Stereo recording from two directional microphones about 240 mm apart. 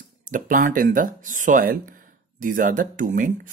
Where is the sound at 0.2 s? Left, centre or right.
Right.